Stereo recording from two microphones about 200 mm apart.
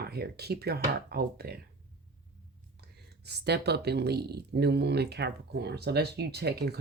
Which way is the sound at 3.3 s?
55° right (ahead or behind).